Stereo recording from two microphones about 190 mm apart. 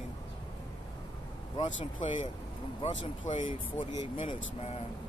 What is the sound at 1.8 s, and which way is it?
Speech, 35° left (ahead or behind).